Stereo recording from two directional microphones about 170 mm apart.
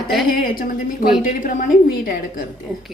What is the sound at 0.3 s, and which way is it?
A woman's voice, 55° left (ahead or behind).